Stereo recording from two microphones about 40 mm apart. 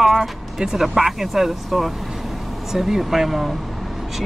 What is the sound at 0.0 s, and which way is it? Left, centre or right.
Music, centre.